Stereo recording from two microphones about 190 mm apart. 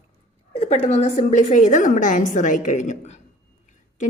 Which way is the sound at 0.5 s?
35° left (ahead or behind).